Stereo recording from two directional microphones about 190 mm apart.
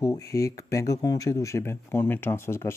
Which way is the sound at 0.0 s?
15° left (ahead or behind).